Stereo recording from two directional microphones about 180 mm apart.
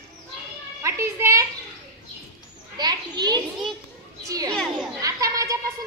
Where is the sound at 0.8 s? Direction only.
15° right (ahead or behind).